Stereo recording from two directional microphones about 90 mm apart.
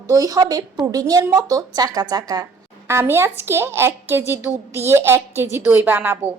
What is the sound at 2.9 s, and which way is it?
A woman's voice, 30° right (ahead or behind).